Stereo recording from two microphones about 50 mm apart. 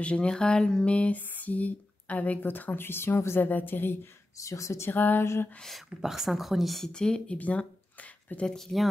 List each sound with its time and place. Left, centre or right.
0.0 s speech: left
3.3 s speech: left
4.0 s speech: left
4.9 s speech: left
5.2 s a sound: left
5.6 s a woman's voice: centre
5.9 s a woman's voice: centre
6.9 s speech: centre
7.3 s a sound: left
8.5 s speech: centre